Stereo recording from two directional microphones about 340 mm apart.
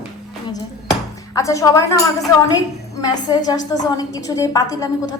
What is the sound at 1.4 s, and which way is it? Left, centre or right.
Speech, centre.